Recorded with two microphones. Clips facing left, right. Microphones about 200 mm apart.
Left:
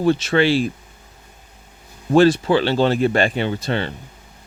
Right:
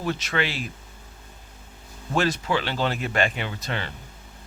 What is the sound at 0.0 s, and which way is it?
Speech, 30° left (ahead or behind).